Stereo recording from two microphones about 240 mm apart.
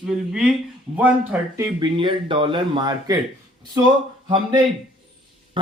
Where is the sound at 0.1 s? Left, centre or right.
Centre.